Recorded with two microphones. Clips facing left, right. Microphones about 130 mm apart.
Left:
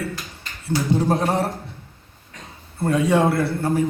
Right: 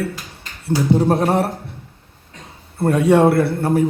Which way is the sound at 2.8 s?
60° right (ahead or behind).